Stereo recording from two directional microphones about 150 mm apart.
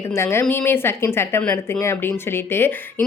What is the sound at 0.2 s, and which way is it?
Speech, 15° left (ahead or behind).